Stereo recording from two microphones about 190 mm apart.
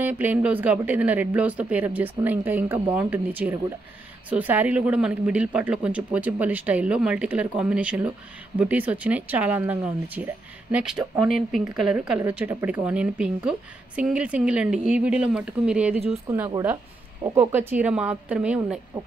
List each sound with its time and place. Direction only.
0.0 s a woman's voice: 10° right (ahead or behind)
16.3 s speech: 20° right (ahead or behind)